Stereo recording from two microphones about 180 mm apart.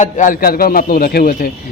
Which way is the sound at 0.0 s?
45° left (ahead or behind).